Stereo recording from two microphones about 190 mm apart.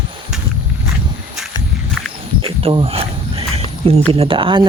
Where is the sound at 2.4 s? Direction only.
30° right (ahead or behind).